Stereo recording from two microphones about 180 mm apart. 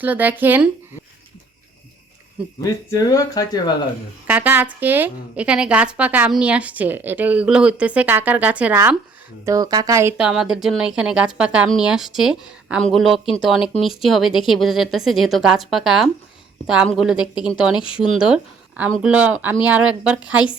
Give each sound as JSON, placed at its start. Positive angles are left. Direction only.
{"t": 0.0, "sound": "a woman's voice", "side_deg": -10}
{"t": 2.6, "sound": "speech", "side_deg": 20}
{"t": 4.3, "sound": "a woman's voice", "side_deg": -10}
{"t": 17.7, "sound": "speech", "side_deg": 30}
{"t": 18.0, "sound": "a woman's voice", "side_deg": -5}